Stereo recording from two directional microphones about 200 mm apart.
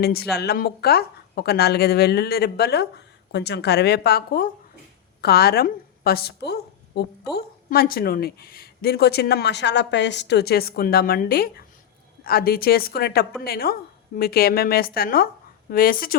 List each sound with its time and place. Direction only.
0.0 s a woman's voice: 50° left (ahead or behind)